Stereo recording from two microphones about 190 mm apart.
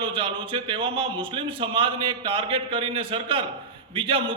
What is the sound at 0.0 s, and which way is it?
A man's voice, 30° right (ahead or behind).